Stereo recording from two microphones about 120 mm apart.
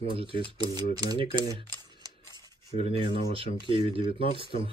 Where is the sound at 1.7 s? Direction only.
35° right (ahead or behind).